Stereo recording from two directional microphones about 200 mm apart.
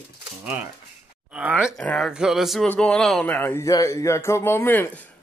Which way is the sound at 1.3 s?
5° right (ahead or behind).